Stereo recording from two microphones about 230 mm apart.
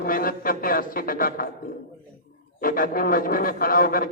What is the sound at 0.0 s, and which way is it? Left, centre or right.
A man's voice, left.